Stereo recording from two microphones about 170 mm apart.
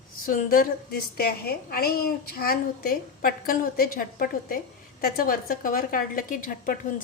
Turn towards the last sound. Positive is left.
turn(degrees=55)  # may be behind; listen again after turning